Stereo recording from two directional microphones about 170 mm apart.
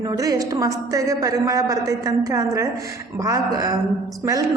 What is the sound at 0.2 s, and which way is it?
A woman's voice, 20° right (ahead or behind).